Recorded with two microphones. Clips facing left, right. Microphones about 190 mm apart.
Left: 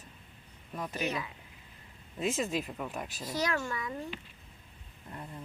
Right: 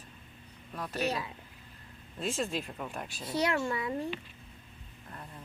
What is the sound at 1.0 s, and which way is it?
Speech, 30° right (ahead or behind).